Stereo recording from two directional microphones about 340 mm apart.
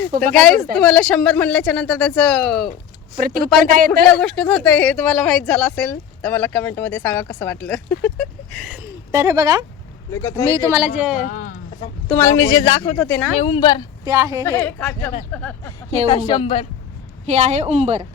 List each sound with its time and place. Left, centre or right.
0.3 s speech: centre
3.2 s a woman's voice: right
4.2 s speech: centre
10.1 s speech: centre
10.4 s speech: centre
11.2 s a sound: left
12.0 s speech: centre
14.0 s speech: centre
14.4 s speech: centre
17.2 s a woman's voice: centre